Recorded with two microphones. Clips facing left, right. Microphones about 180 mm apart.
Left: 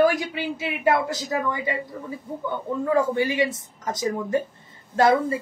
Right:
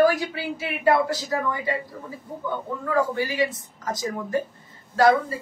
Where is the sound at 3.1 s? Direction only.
20° left (ahead or behind).